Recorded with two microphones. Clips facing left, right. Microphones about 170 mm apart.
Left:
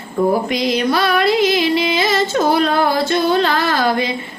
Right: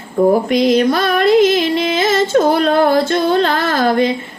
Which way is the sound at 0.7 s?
45° right (ahead or behind).